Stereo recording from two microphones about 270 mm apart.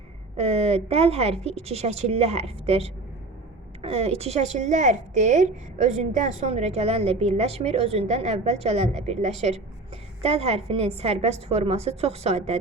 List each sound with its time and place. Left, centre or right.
0.3 s a woman's voice: right